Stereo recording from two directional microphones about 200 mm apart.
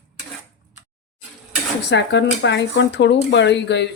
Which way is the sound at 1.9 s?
60° left (ahead or behind).